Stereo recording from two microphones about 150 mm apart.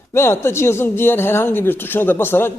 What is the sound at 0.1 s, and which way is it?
A man's voice, 15° left (ahead or behind).